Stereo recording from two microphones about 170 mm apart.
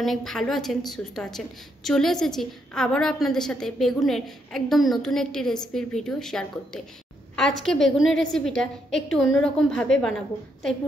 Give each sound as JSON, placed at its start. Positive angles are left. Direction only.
{"t": 0.0, "sound": "a woman's voice", "side_deg": 0}